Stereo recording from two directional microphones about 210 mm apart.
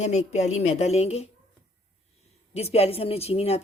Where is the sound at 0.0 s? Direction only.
30° left (ahead or behind).